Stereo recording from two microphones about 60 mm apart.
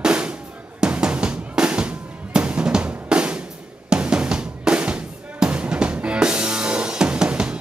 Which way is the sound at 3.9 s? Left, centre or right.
Centre.